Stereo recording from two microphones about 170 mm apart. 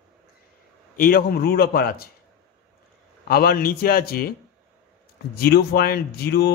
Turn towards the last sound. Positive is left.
turn(degrees=70)  # may be behind; listen again after turning